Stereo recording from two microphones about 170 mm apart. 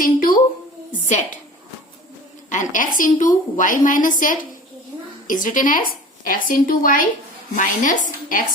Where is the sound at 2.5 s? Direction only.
50° left (ahead or behind).